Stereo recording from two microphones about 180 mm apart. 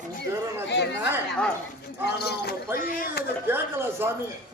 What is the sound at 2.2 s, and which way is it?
Speech, 65° left (ahead or behind).